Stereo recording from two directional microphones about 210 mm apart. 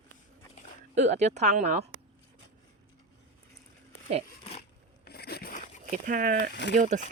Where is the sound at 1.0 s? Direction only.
35° right (ahead or behind).